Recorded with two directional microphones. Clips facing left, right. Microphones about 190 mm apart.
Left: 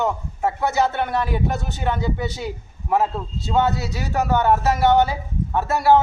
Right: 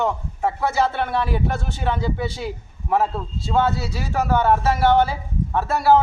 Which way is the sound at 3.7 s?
30° right (ahead or behind).